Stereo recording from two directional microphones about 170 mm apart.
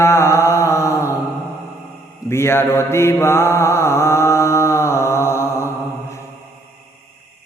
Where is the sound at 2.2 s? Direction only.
15° left (ahead or behind).